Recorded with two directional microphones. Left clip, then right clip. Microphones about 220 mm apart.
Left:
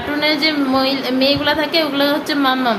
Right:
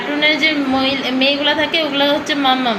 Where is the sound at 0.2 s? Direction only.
50° left (ahead or behind).